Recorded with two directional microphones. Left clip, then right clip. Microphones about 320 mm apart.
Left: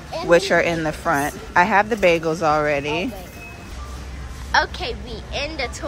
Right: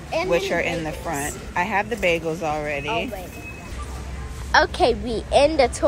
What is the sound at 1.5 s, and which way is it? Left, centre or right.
Speech, centre.